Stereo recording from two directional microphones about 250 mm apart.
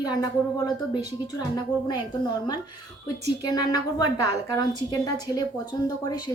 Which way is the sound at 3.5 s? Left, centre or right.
Centre.